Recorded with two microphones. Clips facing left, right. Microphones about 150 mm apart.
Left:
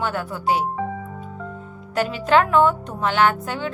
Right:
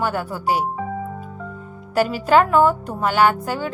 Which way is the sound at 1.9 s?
10° right (ahead or behind).